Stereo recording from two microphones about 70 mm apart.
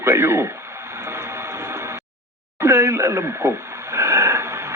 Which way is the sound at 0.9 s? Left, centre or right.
Right.